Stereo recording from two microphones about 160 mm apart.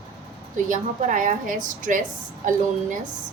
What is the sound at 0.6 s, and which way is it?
A woman's voice, 55° right (ahead or behind).